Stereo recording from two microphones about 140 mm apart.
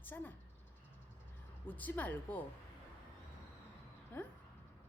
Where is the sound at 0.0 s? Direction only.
15° left (ahead or behind).